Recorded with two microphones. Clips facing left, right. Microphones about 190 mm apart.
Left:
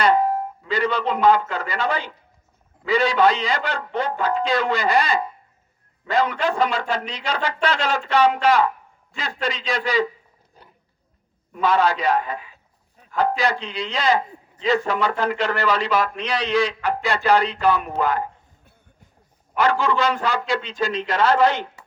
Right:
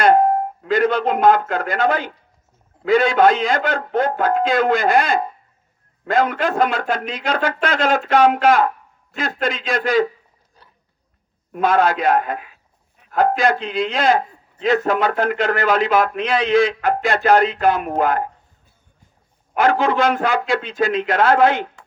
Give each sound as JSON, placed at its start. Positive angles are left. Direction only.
{"t": 0.0, "sound": "a man's voice", "side_deg": -50}
{"t": 11.5, "sound": "a man's voice", "side_deg": -50}
{"t": 19.5, "sound": "a man's voice", "side_deg": -50}